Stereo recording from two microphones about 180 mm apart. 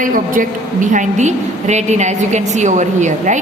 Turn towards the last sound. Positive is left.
turn(degrees=-40)  # may be behind; listen again after turning